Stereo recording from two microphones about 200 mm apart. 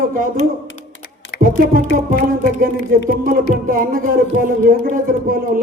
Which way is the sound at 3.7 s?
45° right (ahead or behind).